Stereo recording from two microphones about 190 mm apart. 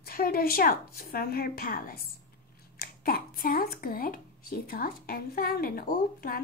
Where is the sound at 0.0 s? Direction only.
50° left (ahead or behind).